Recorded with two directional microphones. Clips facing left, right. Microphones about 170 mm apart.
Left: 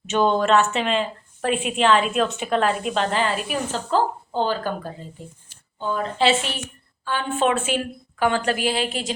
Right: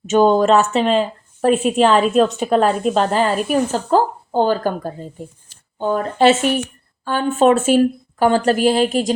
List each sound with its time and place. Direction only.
0.1 s a woman's voice: 40° right (ahead or behind)